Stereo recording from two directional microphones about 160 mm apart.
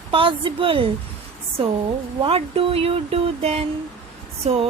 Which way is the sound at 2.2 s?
35° right (ahead or behind).